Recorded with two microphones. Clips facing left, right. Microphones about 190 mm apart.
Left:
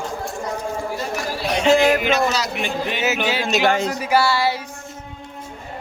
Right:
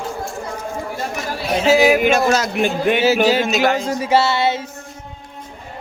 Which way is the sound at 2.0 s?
50° right (ahead or behind).